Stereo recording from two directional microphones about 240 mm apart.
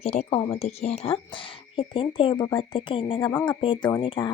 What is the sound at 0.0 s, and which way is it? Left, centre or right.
Speech, left.